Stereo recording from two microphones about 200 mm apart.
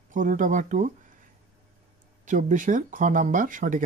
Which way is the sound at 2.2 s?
40° right (ahead or behind).